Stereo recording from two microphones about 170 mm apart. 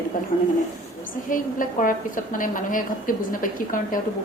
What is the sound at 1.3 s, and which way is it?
A woman's voice, 55° left (ahead or behind).